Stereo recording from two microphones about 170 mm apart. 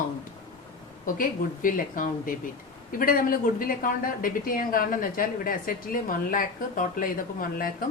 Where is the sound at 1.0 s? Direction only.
55° left (ahead or behind).